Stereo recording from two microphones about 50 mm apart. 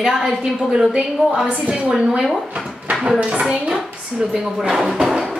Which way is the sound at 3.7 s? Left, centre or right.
Centre.